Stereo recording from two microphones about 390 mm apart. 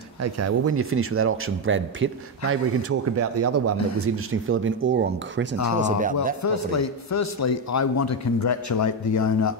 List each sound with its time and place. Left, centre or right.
0.2 s a man's voice: right; by 6.1 s centre
6.4 s speech: left